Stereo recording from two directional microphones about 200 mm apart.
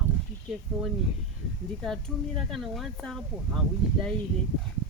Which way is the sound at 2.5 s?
Centre (ahead or behind).